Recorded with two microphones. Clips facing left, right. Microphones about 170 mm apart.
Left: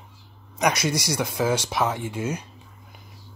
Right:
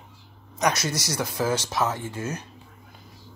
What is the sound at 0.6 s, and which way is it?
Speech, 10° left (ahead or behind).